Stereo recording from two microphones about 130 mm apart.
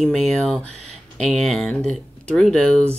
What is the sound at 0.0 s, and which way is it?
Speech, 5° left (ahead or behind).